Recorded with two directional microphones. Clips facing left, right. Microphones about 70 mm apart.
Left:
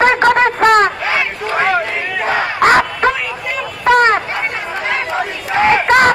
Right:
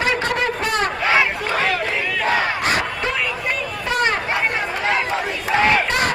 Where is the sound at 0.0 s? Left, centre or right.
Left.